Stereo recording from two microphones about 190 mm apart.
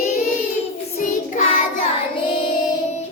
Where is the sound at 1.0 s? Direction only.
45° left (ahead or behind).